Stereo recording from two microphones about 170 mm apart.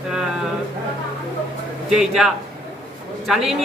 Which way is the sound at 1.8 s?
5° right (ahead or behind).